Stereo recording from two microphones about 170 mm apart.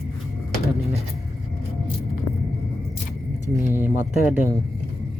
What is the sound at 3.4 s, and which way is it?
Speech, 15° right (ahead or behind).